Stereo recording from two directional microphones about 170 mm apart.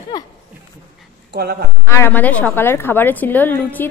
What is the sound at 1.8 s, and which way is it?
A woman's voice, 15° left (ahead or behind).